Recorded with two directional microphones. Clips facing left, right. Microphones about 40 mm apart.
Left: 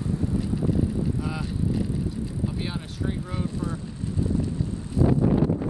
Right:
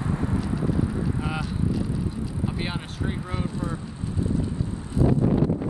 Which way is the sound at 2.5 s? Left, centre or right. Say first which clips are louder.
Right 1 dB; right.